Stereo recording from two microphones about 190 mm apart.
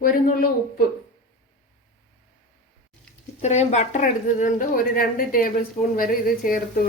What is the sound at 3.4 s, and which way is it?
A woman's voice, 35° left (ahead or behind).